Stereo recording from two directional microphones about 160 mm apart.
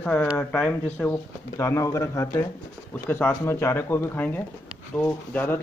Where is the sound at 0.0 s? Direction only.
5° left (ahead or behind).